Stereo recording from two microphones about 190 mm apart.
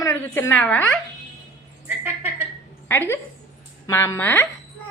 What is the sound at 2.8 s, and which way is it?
A woman's voice, 10° left (ahead or behind).